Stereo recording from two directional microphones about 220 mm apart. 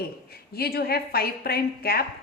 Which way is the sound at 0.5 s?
45° left (ahead or behind).